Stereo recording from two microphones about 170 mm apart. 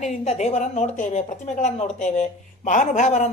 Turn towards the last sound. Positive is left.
turn(degrees=45)  # may be behind; listen again after turning